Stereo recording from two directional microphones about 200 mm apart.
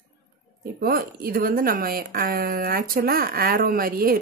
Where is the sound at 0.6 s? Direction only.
45° right (ahead or behind).